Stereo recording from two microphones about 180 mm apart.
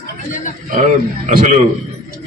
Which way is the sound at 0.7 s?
45° right (ahead or behind).